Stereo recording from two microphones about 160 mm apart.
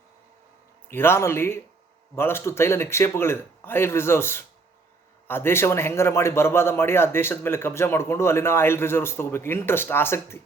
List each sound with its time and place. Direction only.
0.9 s a man's voice: 15° left (ahead or behind)